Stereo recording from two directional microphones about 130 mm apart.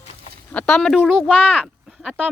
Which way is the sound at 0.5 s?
5° left (ahead or behind).